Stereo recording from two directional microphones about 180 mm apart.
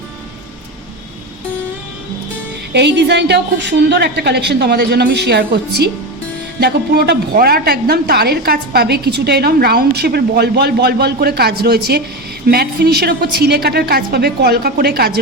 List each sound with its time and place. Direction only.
2.7 s a woman's voice: 70° right (ahead or behind)